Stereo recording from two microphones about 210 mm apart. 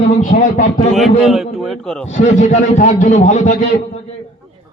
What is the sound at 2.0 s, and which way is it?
A man's voice, 35° left (ahead or behind).